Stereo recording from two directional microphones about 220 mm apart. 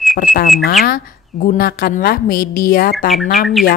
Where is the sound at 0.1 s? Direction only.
40° left (ahead or behind).